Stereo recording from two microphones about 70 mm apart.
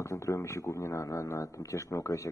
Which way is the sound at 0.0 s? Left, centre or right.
Left.